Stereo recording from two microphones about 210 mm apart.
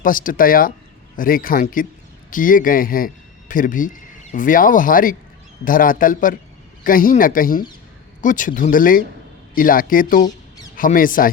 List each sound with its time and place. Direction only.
0.0 s speech: 40° left (ahead or behind)